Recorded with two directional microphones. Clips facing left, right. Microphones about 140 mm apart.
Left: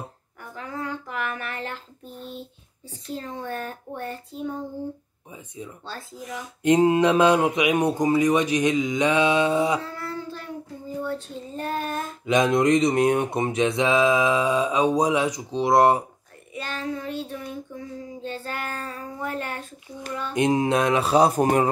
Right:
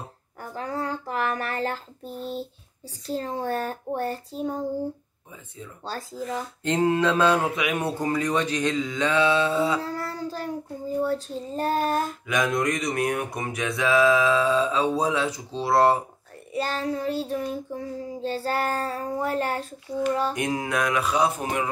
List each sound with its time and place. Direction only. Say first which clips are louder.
0.4 s a sound: right 3 dB; 35° right (ahead or behind)
3.1 s child singing: right 4 dB; 35° right (ahead or behind)
5.9 s child singing: right 6 dB; 40° right (ahead or behind)
6.4 s speech: left 6 dB; 15° left (ahead or behind)
9.8 s child singing: right 2 dB; 40° right (ahead or behind)
12.3 s speech: left 8 dB; 25° left (ahead or behind)
16.5 s child singing: right 4 dB; 35° right (ahead or behind)
20.3 s speech: left 6 dB; 25° left (ahead or behind); by 21.6 s 40° left (ahead or behind)